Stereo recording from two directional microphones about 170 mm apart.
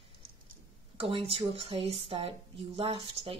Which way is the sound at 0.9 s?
35° right (ahead or behind).